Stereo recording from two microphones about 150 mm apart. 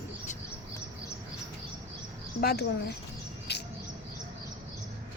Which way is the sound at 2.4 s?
90° left.